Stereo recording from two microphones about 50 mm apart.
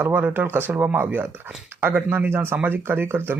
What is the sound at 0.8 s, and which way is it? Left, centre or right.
Speech, right.